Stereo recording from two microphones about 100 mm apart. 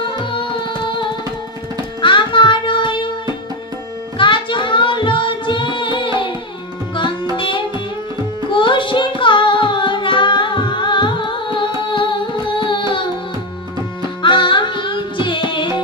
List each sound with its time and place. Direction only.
0.2 s music: 55° left (ahead or behind)
4.2 s child singing: 55° left (ahead or behind)
7.3 s music: 60° left (ahead or behind)
14.2 s music: 55° left (ahead or behind)